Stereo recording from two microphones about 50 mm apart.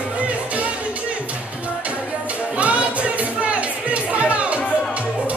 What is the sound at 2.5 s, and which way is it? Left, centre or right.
Music, right.